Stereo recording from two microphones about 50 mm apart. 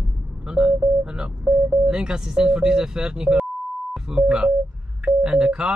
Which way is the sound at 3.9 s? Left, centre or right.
Centre.